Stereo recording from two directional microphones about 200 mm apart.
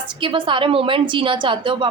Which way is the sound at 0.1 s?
25° right (ahead or behind).